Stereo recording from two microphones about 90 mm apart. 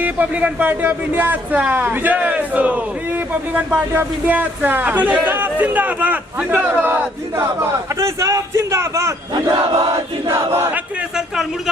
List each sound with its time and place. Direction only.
0.0 s a man's voice: 15° right (ahead or behind); by 9.1 s 35° right (ahead or behind)
9.3 s battle cry: 55° right (ahead or behind)
10.2 s battle cry: 30° right (ahead or behind)